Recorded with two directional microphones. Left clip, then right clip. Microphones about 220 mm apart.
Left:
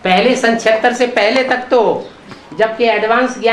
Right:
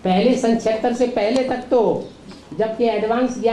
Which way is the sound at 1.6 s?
20° left (ahead or behind).